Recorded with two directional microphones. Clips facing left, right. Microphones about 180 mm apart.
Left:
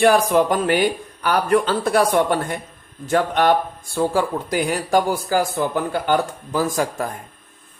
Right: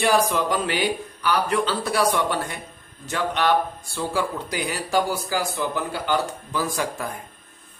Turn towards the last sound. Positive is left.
turn(degrees=45)  # may be behind; listen again after turning